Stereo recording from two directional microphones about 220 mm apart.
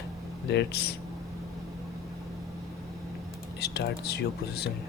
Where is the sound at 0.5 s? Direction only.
45° left (ahead or behind).